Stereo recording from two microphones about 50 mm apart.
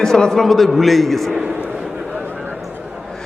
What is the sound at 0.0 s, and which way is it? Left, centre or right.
A man's voice, centre.